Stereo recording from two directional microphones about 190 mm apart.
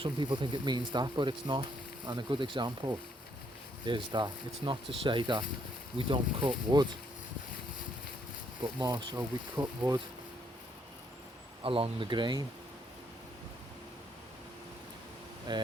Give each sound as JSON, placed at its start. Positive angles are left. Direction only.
{"t": 0.0, "sound": "speech", "side_deg": -25}
{"t": 8.6, "sound": "speech", "side_deg": -20}
{"t": 11.6, "sound": "speech", "side_deg": -30}
{"t": 15.5, "sound": "speech", "side_deg": -20}